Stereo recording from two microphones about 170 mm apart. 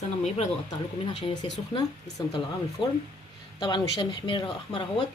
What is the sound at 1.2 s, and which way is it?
Speech, 25° left (ahead or behind).